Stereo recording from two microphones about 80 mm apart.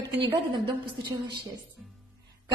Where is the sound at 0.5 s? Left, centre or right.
Right.